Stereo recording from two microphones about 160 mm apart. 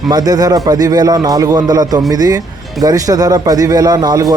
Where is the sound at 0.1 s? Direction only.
25° right (ahead or behind).